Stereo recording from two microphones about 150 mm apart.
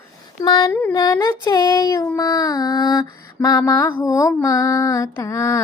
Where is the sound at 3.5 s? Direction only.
10° left (ahead or behind).